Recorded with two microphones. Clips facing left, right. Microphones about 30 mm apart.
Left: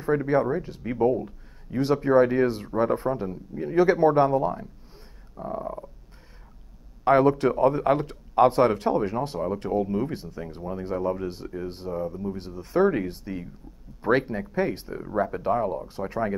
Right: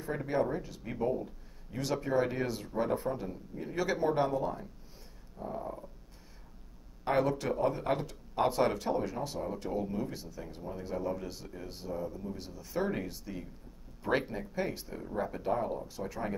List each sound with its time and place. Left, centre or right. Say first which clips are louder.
0.0 s speech: left 9 dB; left
2.3 s speech: left 10 dB; left
3.7 s speech: left 11 dB; left
5.4 s speech: left 7 dB; left
7.1 s speech: left 10 dB; left
14.5 s speech: left 10 dB; left